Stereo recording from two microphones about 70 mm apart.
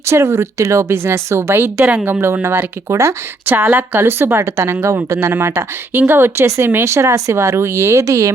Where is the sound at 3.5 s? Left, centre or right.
Right.